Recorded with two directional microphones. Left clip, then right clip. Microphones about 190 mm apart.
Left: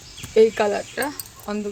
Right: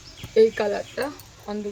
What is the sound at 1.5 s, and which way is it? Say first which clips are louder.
Speech: left 3 dB; 20° left (ahead or behind).